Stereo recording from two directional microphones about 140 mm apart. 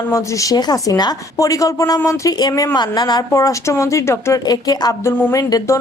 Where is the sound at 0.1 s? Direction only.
20° left (ahead or behind).